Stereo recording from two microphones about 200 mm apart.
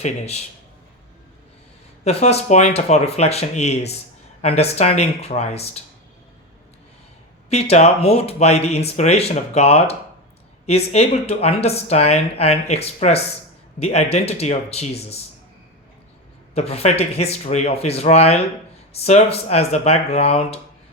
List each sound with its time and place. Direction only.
0.0 s speech: 35° left (ahead or behind)
2.0 s speech: 35° left (ahead or behind)
7.5 s speech: 30° left (ahead or behind)
16.6 s speech: 30° left (ahead or behind)